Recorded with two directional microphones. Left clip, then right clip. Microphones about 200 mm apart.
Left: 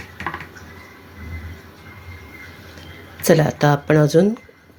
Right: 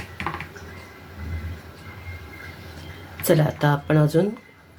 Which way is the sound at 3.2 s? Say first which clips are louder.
Left 5 dB; 30° left (ahead or behind).